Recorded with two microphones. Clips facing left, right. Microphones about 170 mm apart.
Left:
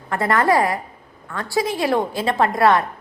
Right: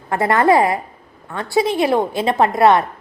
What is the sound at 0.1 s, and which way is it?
A woman's voice, 20° right (ahead or behind).